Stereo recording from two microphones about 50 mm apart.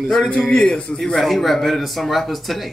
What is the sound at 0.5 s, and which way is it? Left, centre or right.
Speech, left.